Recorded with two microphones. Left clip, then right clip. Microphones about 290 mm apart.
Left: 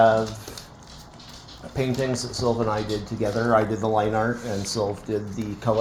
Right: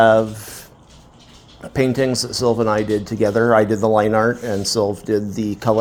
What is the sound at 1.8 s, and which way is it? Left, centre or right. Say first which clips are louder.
Speech: right 8 dB; right.